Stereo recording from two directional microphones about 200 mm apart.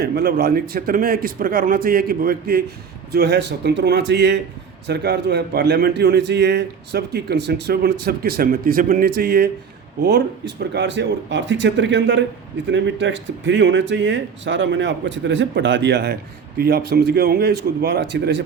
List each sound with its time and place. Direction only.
0.0 s a man's voice: 50° right (ahead or behind)